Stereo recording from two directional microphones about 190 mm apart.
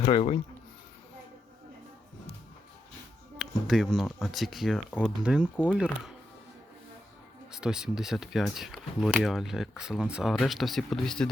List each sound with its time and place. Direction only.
0.0 s speech: 30° left (ahead or behind)
3.3 s speech: centre (ahead or behind)
7.5 s speech: 5° right (ahead or behind)